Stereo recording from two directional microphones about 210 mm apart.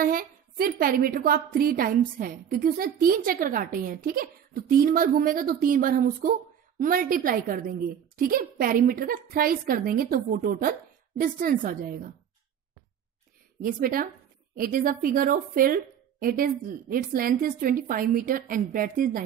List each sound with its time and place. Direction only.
0.0 s a woman's voice: 45° right (ahead or behind)
13.6 s a woman's voice: 40° right (ahead or behind)